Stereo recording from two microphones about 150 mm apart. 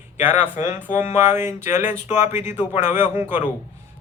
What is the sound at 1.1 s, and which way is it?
Speech, 15° right (ahead or behind).